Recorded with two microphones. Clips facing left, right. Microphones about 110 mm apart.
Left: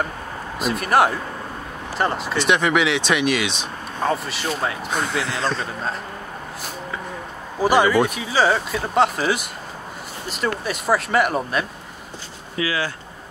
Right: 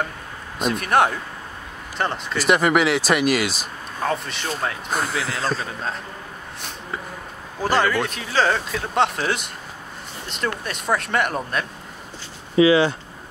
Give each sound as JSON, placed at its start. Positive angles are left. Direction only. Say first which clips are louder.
{"t": 0.6, "sound": "speech", "louder": "left 1 dB", "side_deg": 0}
{"t": 7.6, "sound": "speech", "louder": "left 4 dB", "side_deg": 10}
{"t": 12.5, "sound": "speech", "louder": "right 9 dB", "side_deg": -25}